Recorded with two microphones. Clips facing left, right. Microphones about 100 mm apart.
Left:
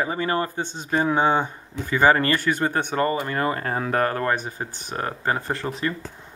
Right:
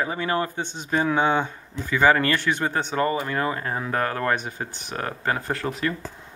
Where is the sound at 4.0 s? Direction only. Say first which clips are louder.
Left 1 dB; 30° left (ahead or behind).